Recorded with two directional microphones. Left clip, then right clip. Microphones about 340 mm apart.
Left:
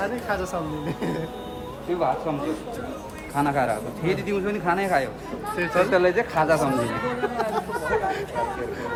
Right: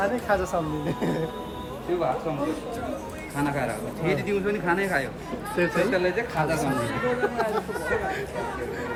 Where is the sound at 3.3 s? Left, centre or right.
Centre.